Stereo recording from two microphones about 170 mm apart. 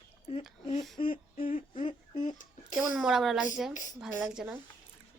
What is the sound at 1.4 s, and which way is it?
Speech, 50° left (ahead or behind).